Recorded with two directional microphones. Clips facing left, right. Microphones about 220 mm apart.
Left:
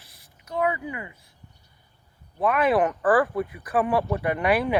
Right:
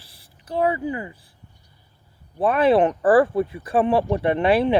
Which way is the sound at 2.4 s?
30° right (ahead or behind).